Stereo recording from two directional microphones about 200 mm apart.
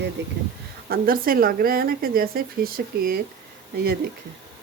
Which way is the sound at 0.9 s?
45° right (ahead or behind).